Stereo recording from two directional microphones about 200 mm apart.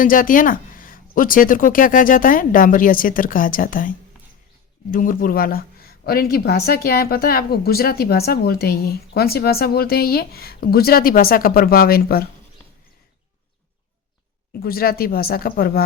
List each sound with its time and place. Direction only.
0.0 s speech: 45° left (ahead or behind)
14.6 s speech: 50° left (ahead or behind)